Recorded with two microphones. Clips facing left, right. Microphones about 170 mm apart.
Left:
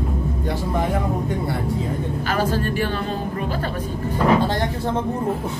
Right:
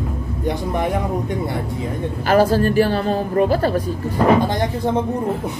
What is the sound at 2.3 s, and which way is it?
A woman's voice, 40° right (ahead or behind).